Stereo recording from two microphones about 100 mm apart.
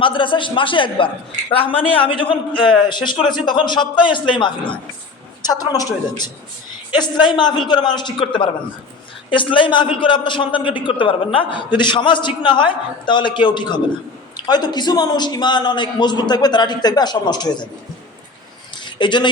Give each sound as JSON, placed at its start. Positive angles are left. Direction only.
{"t": 0.0, "sound": "a man's voice", "side_deg": 55}
{"t": 5.4, "sound": "a woman's voice", "side_deg": 40}
{"t": 18.9, "sound": "speech", "side_deg": 50}